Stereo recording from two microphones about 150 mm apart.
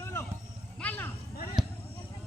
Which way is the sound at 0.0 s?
15° left (ahead or behind).